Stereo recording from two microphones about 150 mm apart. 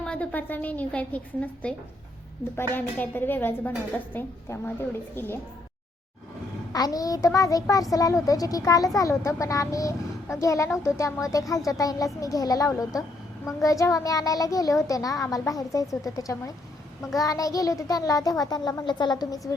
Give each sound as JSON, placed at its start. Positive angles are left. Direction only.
{"t": 0.0, "sound": "a woman's voice", "side_deg": 5}
{"t": 2.7, "sound": "a woman's voice", "side_deg": 15}
{"t": 6.7, "sound": "speech", "side_deg": 25}